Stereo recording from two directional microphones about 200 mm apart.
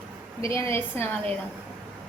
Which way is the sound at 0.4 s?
15° left (ahead or behind).